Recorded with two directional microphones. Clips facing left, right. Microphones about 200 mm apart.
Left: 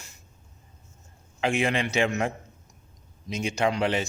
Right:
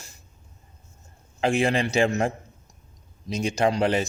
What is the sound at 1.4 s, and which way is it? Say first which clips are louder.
Speech: right 3 dB; 35° right (ahead or behind).